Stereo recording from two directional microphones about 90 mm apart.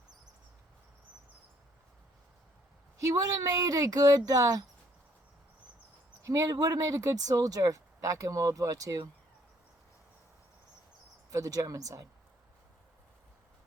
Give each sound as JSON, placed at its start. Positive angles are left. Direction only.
{"t": 3.0, "sound": "speech", "side_deg": -40}
{"t": 6.2, "sound": "speech", "side_deg": -35}
{"t": 11.3, "sound": "speech", "side_deg": -40}